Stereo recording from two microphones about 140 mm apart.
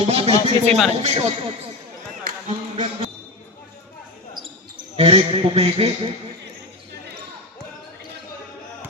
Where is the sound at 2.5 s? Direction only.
50° right (ahead or behind).